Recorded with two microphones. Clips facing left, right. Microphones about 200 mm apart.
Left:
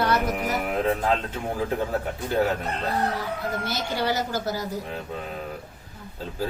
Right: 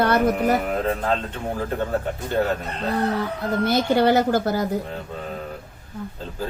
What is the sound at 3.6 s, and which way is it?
A woman's voice, 55° right (ahead or behind).